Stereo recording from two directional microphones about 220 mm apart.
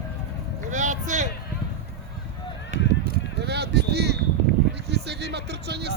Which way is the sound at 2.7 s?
35° right (ahead or behind).